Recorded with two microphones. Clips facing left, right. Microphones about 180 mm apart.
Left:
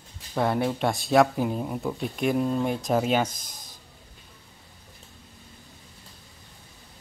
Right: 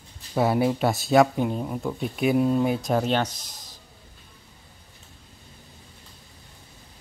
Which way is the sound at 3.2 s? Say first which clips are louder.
Even; 50° left (ahead or behind).